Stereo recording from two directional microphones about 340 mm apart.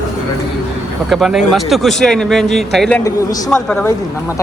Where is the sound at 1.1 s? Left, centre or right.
Centre.